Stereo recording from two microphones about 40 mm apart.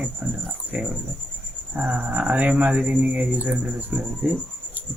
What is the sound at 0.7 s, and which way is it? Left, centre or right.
Speech, right.